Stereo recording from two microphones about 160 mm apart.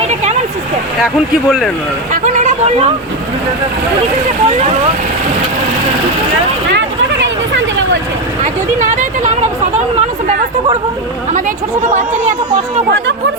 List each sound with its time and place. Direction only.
1.5 s speech: centre (ahead or behind)
2.2 s a sound: 50° right (ahead or behind)
8.8 s speech: 50° right (ahead or behind)